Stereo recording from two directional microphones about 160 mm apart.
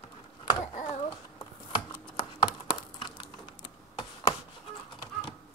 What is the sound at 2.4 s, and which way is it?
Computer keyboard, 30° left (ahead or behind).